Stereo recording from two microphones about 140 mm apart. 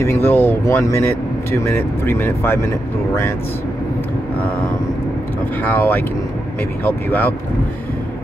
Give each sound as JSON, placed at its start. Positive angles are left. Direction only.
{"t": 0.0, "sound": "speech", "side_deg": 20}
{"t": 5.6, "sound": "speech", "side_deg": 15}